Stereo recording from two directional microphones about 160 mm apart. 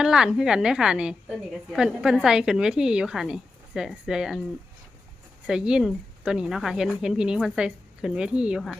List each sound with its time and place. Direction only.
0.0 s a woman's voice: 5° right (ahead or behind)
5.5 s a woman's voice: 5° right (ahead or behind)